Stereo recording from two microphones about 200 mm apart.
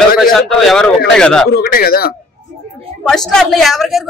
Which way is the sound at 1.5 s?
50° left (ahead or behind).